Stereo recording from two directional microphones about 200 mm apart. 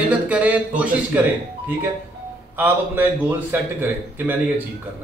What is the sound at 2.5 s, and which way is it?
A man's voice, 10° right (ahead or behind).